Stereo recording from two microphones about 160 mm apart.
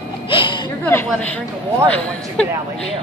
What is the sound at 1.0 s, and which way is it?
Speech, 10° left (ahead or behind).